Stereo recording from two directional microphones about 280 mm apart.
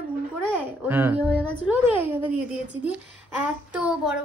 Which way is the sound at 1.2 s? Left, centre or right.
Centre.